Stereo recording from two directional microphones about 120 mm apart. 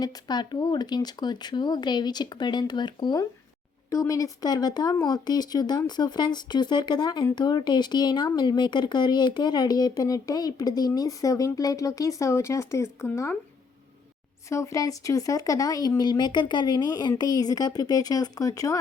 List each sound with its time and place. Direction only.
0.0 s speech: 35° left (ahead or behind)
3.8 s speech: 25° left (ahead or behind)
14.5 s speech: 25° left (ahead or behind)